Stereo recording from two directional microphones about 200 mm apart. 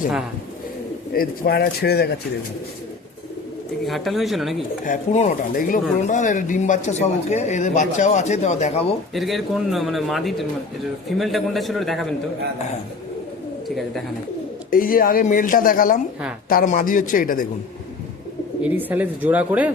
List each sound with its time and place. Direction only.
1.1 s speech: 50° left (ahead or behind)
3.8 s a man's voice: centre (ahead or behind)
4.9 s speech: 40° left (ahead or behind)
9.1 s a man's voice: centre (ahead or behind)
13.7 s a man's voice: centre (ahead or behind)
14.7 s speech: 45° left (ahead or behind)
18.6 s speech: 10° right (ahead or behind)